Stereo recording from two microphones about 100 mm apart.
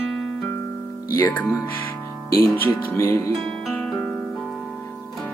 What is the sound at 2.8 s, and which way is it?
Speech, 25° left (ahead or behind).